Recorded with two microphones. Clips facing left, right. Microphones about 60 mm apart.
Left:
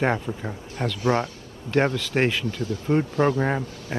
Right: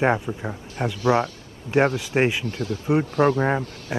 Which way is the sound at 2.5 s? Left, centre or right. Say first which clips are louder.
Right 1 dB; right.